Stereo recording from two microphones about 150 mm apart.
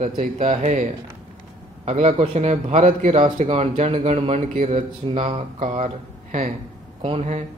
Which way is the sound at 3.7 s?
45° right (ahead or behind).